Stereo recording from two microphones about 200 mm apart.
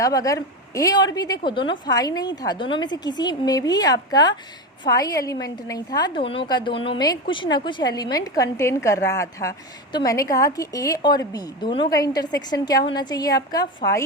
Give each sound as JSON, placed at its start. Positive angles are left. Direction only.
{"t": 0.0, "sound": "a woman's voice", "side_deg": 15}